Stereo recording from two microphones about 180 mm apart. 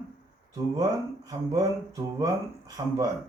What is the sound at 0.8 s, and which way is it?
Speech, 20° right (ahead or behind).